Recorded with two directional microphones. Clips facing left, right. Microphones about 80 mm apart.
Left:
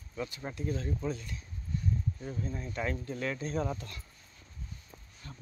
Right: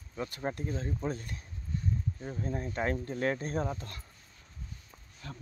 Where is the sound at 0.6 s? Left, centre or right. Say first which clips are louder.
Left 1 dB; right.